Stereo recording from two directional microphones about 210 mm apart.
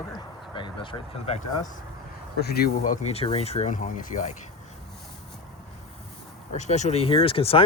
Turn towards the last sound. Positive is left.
turn(degrees=25)  # may be behind; listen again after turning